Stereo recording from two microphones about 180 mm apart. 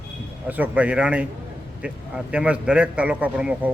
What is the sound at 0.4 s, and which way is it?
A man's voice, 10° right (ahead or behind).